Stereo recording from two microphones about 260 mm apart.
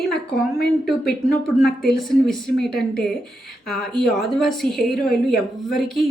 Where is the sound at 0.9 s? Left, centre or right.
Centre.